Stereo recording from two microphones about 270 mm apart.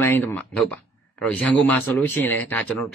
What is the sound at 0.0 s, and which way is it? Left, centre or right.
Speech, centre.